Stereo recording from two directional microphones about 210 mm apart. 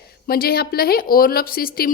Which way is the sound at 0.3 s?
45° left (ahead or behind).